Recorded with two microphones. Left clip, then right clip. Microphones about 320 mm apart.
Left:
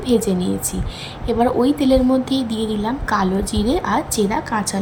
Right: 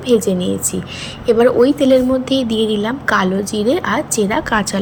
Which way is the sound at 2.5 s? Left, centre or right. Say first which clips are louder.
Right 7 dB; centre.